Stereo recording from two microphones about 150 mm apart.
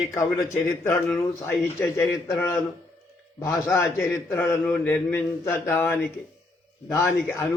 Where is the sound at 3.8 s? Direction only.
15° left (ahead or behind).